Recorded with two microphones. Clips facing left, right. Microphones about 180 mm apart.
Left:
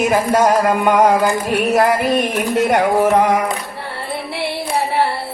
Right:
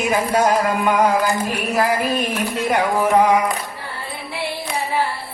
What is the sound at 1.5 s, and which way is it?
Music, 65° left (ahead or behind).